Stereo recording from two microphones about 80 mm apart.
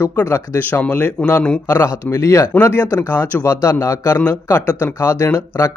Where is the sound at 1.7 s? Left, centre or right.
Left.